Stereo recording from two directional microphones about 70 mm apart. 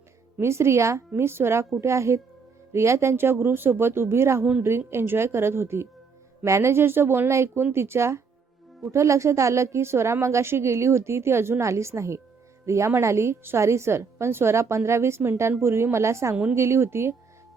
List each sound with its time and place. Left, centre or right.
0.3 s a woman's voice: right
16.3 s speech: right
16.6 s a woman's voice: right